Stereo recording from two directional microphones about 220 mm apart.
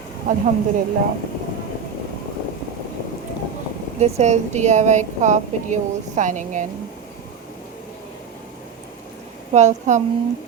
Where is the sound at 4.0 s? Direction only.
30° right (ahead or behind).